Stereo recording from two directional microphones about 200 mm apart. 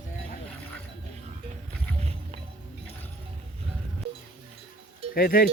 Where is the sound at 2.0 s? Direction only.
30° right (ahead or behind).